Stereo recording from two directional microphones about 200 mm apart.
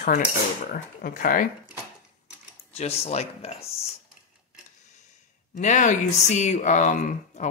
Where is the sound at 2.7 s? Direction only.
30° left (ahead or behind).